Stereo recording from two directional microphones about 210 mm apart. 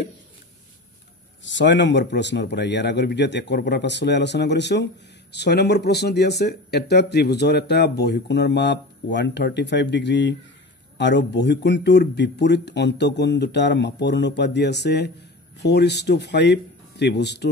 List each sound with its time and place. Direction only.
1.4 s speech: 60° left (ahead or behind)